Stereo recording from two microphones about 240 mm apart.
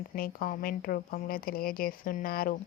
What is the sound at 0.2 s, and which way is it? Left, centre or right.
Speech, left.